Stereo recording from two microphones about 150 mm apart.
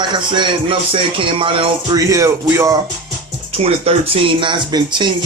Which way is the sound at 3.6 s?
40° right (ahead or behind).